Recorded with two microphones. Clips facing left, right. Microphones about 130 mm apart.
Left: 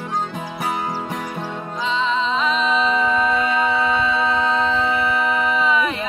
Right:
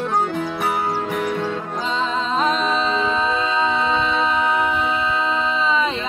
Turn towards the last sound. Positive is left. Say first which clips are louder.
# left 1 dB
turn(degrees=-25)  # may be behind; listen again after turning